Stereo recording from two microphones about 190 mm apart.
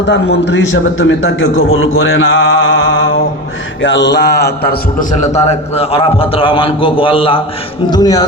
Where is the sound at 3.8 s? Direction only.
70° left (ahead or behind).